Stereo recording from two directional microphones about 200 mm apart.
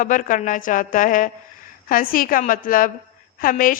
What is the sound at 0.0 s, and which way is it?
A woman's voice, 40° left (ahead or behind).